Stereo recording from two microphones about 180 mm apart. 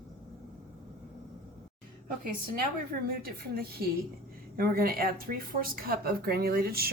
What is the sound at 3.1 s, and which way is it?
Speech, 55° right (ahead or behind).